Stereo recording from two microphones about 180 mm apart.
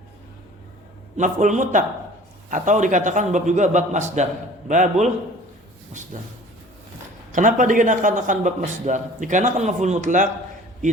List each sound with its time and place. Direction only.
1.1 s a man's voice: 45° right (ahead or behind)
6.1 s a man's voice: 45° right (ahead or behind)
7.3 s a man's voice: 45° right (ahead or behind)